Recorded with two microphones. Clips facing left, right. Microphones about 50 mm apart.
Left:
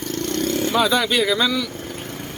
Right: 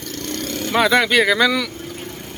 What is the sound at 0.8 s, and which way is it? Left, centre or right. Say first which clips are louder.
Speech: right 5 dB; right.